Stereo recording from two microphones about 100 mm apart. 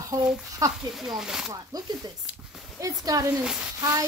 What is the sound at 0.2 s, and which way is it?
Speech, 5° right (ahead or behind).